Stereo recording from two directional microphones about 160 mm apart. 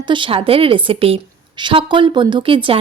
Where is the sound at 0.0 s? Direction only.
30° right (ahead or behind).